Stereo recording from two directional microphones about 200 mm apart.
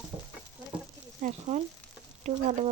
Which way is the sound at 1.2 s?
40° right (ahead or behind).